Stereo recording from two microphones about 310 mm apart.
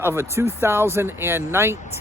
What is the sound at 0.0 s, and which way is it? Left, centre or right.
Speech, centre.